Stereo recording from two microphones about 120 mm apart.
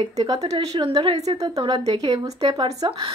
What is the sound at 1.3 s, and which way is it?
Speech, 40° right (ahead or behind).